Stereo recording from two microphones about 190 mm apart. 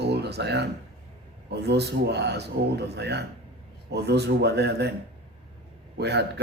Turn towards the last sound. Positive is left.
turn(degrees=-60)  # may be behind; listen again after turning